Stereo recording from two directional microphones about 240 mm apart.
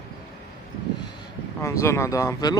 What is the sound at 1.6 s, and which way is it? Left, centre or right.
Speech, centre.